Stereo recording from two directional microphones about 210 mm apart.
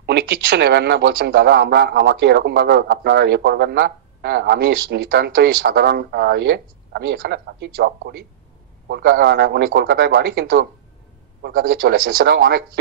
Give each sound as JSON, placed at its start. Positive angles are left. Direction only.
{"t": 0.0, "sound": "a man's voice", "side_deg": -50}